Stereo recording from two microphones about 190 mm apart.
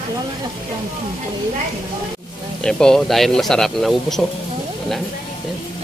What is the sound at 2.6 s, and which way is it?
A man's voice, 5° left (ahead or behind).